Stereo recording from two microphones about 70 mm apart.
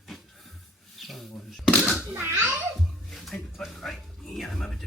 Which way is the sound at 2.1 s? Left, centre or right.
Right.